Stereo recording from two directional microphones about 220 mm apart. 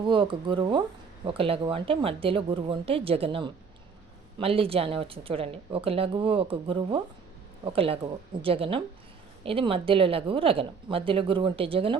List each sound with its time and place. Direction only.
0.0 s speech: 20° right (ahead or behind)